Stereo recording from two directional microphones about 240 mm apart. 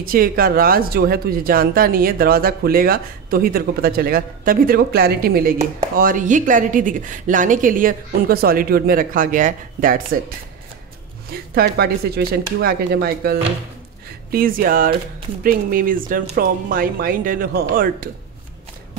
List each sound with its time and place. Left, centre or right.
0.0 s speech: right
11.5 s speech: right